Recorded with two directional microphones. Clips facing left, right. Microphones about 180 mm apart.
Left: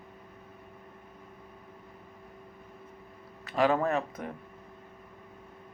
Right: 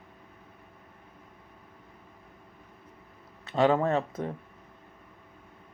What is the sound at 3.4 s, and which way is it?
Speech, 25° right (ahead or behind).